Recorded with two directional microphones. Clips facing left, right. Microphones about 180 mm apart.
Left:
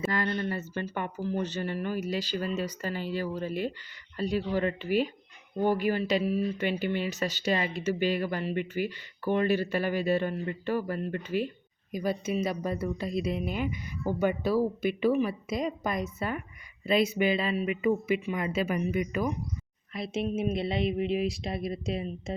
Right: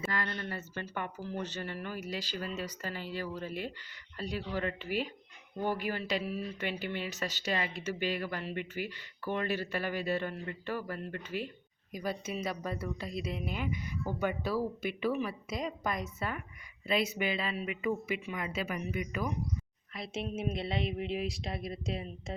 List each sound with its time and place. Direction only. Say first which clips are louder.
0.1 s speech: left 7 dB; 25° left (ahead or behind)
20.1 s speech: left 6 dB; 15° left (ahead or behind)